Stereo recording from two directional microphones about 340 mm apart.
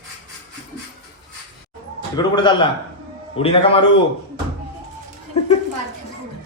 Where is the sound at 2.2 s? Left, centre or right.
Centre.